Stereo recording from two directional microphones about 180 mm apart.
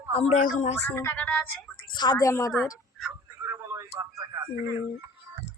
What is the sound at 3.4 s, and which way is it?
Radio, 15° right (ahead or behind).